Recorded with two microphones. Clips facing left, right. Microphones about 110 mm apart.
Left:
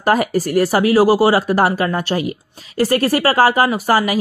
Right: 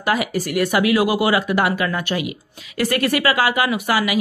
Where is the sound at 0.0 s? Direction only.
40° left (ahead or behind).